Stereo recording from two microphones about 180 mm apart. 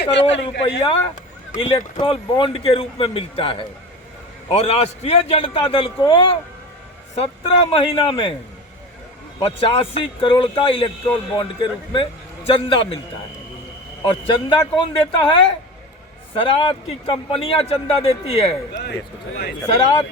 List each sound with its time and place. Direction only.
0.0 s speech: 80° left
0.6 s a man's voice: 30° left (ahead or behind)
9.4 s a man's voice: 30° left (ahead or behind)
14.0 s a man's voice: 30° left (ahead or behind)
18.7 s speech: 65° left (ahead or behind)